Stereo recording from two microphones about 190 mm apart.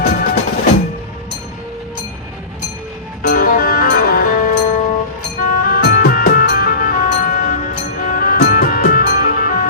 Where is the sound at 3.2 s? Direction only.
50° left (ahead or behind).